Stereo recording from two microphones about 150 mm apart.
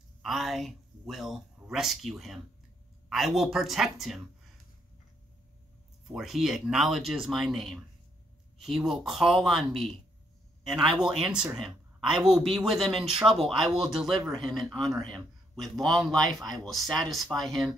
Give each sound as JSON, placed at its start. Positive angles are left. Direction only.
{"t": 0.2, "sound": "speech", "side_deg": 0}
{"t": 6.1, "sound": "speech", "side_deg": 0}